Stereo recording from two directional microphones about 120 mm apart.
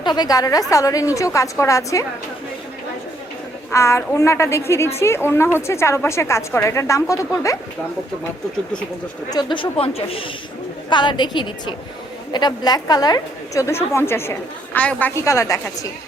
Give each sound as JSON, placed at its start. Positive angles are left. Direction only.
{"t": 0.0, "sound": "a woman's voice", "side_deg": 35}
{"t": 3.7, "sound": "a woman's voice", "side_deg": 25}
{"t": 9.3, "sound": "speech", "side_deg": 40}
{"t": 10.8, "sound": "a woman's voice", "side_deg": 40}